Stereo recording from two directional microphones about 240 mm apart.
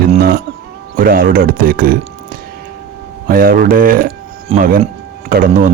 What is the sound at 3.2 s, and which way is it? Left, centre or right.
Speech, right.